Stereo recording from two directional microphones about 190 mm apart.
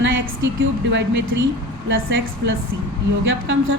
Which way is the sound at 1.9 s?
75° right (ahead or behind).